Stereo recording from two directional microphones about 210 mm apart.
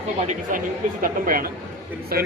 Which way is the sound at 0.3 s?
40° right (ahead or behind).